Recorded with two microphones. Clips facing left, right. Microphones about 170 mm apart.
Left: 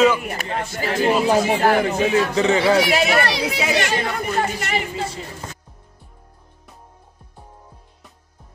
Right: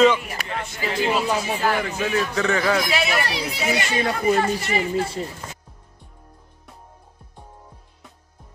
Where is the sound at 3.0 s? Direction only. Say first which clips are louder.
Left 5 dB; 70° left (ahead or behind).